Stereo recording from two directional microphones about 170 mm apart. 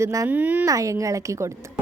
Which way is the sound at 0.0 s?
20° right (ahead or behind).